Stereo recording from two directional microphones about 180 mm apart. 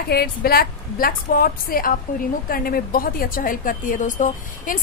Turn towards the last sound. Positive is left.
turn(degrees=45)  # may be behind; listen again after turning